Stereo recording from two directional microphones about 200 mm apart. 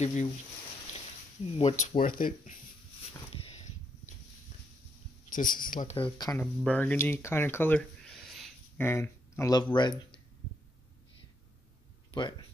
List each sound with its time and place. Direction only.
0.0 s speech: 35° left (ahead or behind)
1.6 s speech: 30° left (ahead or behind)
2.0 s speech: 45° left (ahead or behind)
5.3 s speech: 40° left (ahead or behind)
6.1 s speech: 20° left (ahead or behind)
6.4 s speech: 5° left (ahead or behind)
8.8 s speech: 10° left (ahead or behind)
12.1 s speech: 25° left (ahead or behind)